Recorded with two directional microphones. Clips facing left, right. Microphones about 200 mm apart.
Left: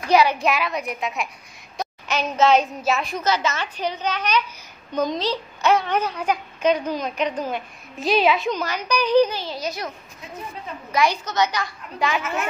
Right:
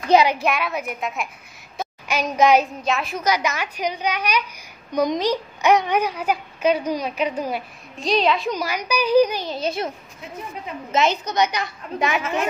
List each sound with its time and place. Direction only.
0.1 s a woman's voice: 20° right (ahead or behind)
0.4 s a woman's voice: centre (ahead or behind)
2.8 s a woman's voice: centre (ahead or behind)
3.3 s a child's voice: 15° right (ahead or behind)
8.0 s a woman's voice: 5° left (ahead or behind)
8.5 s a child's voice: 10° right (ahead or behind)